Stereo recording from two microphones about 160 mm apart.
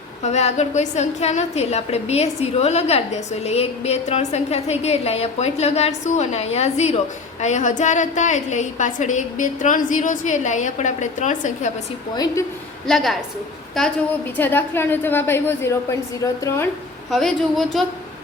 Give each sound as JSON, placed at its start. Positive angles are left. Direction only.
{"t": 0.2, "sound": "a woman's voice", "side_deg": 45}
{"t": 12.1, "sound": "a woman's voice", "side_deg": 25}
{"t": 12.9, "sound": "a woman's voice", "side_deg": 0}
{"t": 17.1, "sound": "a woman's voice", "side_deg": 0}